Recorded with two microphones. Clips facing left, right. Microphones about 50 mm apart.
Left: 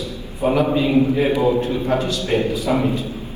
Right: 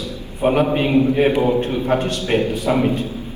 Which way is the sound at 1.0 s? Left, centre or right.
Right.